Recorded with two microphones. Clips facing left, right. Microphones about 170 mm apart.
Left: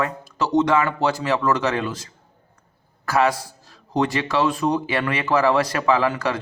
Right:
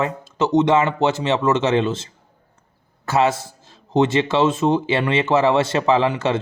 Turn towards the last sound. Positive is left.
turn(degrees=-25)  # may be behind; listen again after turning